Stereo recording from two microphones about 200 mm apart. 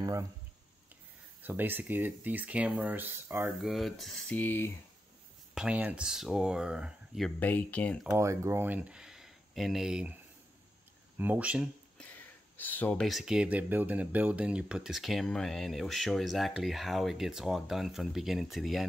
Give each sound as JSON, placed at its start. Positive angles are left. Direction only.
{"t": 0.0, "sound": "speech", "side_deg": -15}
{"t": 1.4, "sound": "speech", "side_deg": -10}
{"t": 3.6, "sound": "speech", "side_deg": 0}
{"t": 5.5, "sound": "speech", "side_deg": -5}
{"t": 8.1, "sound": "speech", "side_deg": -15}
{"t": 11.1, "sound": "speech", "side_deg": -10}
{"t": 12.1, "sound": "speech", "side_deg": 10}